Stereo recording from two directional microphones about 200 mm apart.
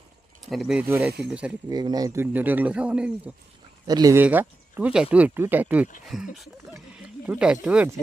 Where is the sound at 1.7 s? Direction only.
20° right (ahead or behind).